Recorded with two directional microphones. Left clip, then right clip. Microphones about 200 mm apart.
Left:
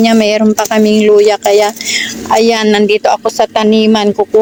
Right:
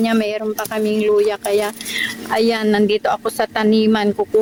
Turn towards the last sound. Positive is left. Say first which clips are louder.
# left 7 dB
turn(degrees=5)  # may be behind; listen again after turning